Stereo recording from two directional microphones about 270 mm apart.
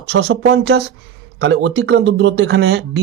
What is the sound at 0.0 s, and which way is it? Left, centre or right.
Speech, right.